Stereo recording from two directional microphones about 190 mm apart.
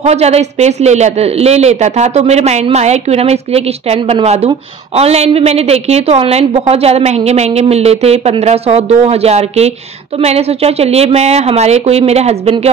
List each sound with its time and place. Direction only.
0.0 s speech: 35° right (ahead or behind)